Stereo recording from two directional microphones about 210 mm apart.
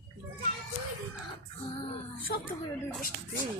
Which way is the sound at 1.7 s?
25° left (ahead or behind).